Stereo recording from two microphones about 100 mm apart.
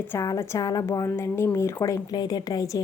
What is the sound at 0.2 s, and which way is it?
A woman's voice, 30° left (ahead or behind).